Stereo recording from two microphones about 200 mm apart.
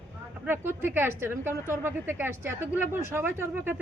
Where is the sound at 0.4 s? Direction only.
10° right (ahead or behind).